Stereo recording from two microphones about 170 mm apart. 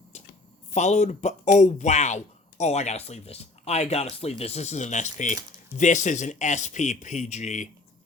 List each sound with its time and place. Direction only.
0.7 s speech: 45° left (ahead or behind)